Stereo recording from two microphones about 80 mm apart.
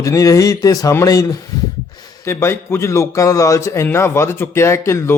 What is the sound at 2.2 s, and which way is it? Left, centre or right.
A man's voice, left.